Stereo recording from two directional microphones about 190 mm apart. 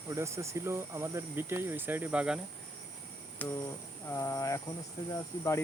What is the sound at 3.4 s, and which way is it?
Speech, 10° left (ahead or behind).